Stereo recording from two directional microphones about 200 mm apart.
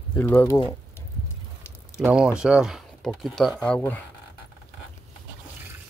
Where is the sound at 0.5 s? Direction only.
20° left (ahead or behind).